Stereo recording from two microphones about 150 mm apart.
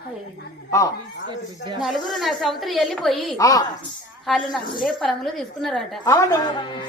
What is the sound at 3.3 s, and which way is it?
Speech, 25° left (ahead or behind).